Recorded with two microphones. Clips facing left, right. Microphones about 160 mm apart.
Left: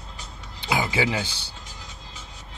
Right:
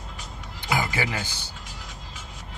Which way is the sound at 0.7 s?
25° left (ahead or behind).